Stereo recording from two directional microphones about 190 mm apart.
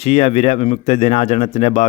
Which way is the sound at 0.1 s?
35° left (ahead or behind).